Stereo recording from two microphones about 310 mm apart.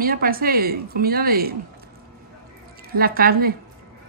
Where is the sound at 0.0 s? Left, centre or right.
Right.